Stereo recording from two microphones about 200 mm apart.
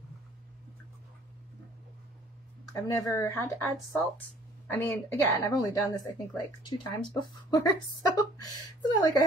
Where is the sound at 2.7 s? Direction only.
15° left (ahead or behind).